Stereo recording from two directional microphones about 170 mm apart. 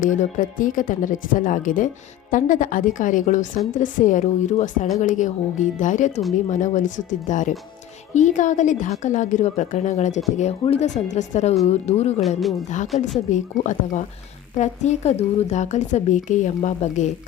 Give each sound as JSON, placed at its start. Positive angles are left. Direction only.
{"t": 0.0, "sound": "a woman's voice", "side_deg": 50}
{"t": 12.4, "sound": "speech", "side_deg": 0}
{"t": 13.0, "sound": "a woman's voice", "side_deg": 45}